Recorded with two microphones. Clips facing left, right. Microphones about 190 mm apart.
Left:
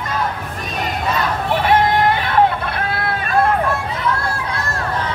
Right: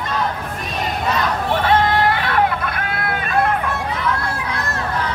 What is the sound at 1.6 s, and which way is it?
Hubbub, 20° left (ahead or behind).